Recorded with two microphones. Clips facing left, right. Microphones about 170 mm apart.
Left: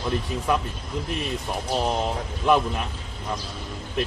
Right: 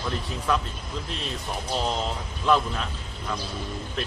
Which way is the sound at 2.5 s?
15° left (ahead or behind).